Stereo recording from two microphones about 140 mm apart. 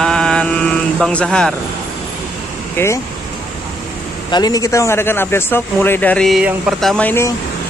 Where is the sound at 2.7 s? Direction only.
20° left (ahead or behind).